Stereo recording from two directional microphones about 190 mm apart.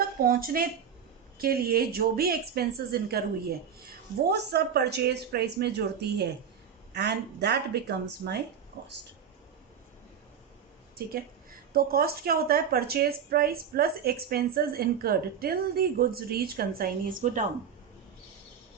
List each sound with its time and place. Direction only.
0.0 s speech: 50° right (ahead or behind)
4.3 s speech: 60° right (ahead or behind)
11.7 s a woman's voice: 50° right (ahead or behind)